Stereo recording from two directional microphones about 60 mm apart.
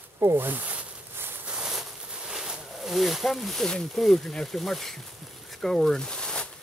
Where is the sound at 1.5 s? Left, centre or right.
Centre.